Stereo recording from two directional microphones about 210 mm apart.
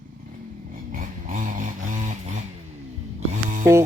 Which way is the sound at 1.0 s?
40° right (ahead or behind).